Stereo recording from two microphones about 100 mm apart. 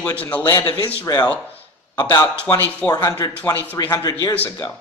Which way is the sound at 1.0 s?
40° left (ahead or behind).